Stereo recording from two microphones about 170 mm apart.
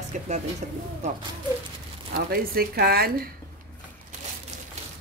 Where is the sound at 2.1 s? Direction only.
60° right (ahead or behind).